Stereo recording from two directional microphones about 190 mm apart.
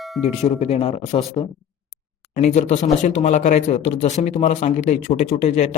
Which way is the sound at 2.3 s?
35° left (ahead or behind).